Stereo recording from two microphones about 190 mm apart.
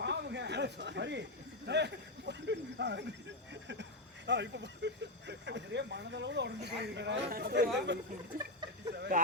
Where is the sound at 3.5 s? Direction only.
70° right (ahead or behind).